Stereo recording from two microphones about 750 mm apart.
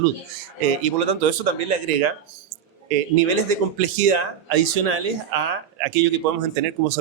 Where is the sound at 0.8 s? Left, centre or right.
Right.